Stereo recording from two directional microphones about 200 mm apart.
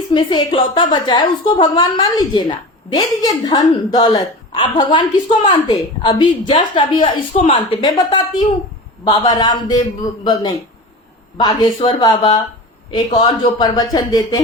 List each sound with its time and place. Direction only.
0.1 s a woman's voice: 25° left (ahead or behind)